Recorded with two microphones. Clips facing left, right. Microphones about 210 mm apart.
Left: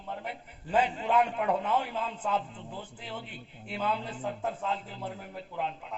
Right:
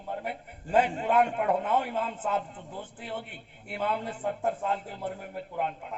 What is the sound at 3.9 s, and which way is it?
Speech, 55° right (ahead or behind).